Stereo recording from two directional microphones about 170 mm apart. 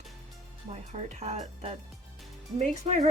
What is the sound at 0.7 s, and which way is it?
A woman's voice, 40° right (ahead or behind).